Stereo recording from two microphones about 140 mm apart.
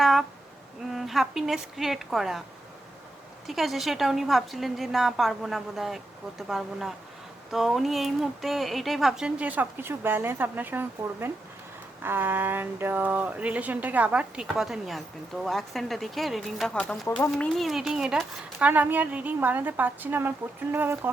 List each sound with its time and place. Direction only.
0.0 s a sound: centre (ahead or behind)
0.9 s a woman's voice: centre (ahead or behind)
3.4 s a woman's voice: centre (ahead or behind)